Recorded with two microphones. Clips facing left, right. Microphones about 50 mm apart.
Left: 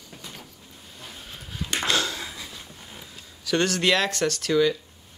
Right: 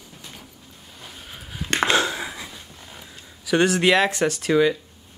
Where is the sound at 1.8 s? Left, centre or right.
Right.